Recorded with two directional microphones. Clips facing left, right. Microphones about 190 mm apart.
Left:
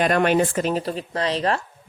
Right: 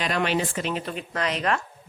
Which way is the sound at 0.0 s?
50° left (ahead or behind).